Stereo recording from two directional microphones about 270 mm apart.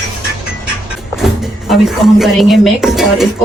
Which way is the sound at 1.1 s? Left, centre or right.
Centre.